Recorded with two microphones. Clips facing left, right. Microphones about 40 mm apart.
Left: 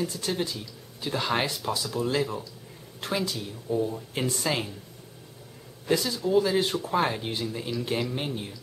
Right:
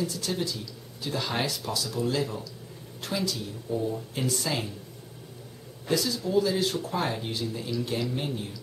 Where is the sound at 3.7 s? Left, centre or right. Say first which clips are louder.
Left 3 dB; centre.